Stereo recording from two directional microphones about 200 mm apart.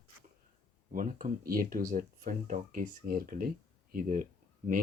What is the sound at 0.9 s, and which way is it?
Speech, 45° right (ahead or behind).